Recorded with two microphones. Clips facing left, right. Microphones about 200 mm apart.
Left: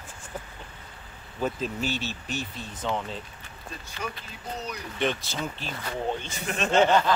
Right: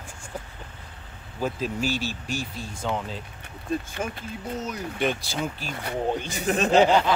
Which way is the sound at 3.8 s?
50° right (ahead or behind).